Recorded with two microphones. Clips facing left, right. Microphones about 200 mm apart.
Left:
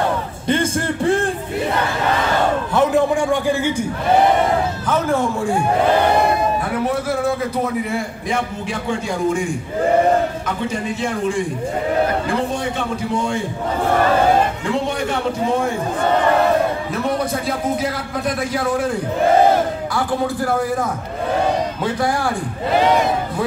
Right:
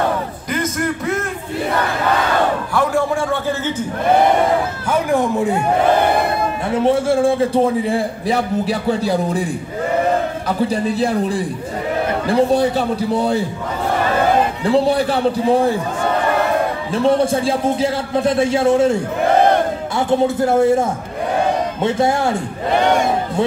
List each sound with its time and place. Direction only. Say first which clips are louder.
0.5 s a man's voice: left 2 dB; 30° left (ahead or behind)
2.7 s a man's voice: left 2 dB; 20° left (ahead or behind)
4.8 s speech: right 3 dB; 15° right (ahead or behind)
6.7 s a man's voice: right 5 dB; 25° right (ahead or behind)
10.6 s a man's voice: right 6 dB; 35° right (ahead or behind)
14.6 s a man's voice: right 6 dB; 35° right (ahead or behind)
16.9 s a man's voice: right 6 dB; 30° right (ahead or behind)
20.0 s a man's voice: right 6 dB; 25° right (ahead or behind)